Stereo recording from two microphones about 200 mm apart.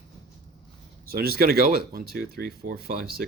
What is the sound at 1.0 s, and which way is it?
Speech, 50° right (ahead or behind).